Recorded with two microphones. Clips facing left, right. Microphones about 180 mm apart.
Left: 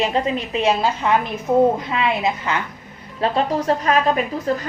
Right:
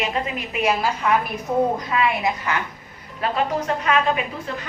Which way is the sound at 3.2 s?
35° left (ahead or behind).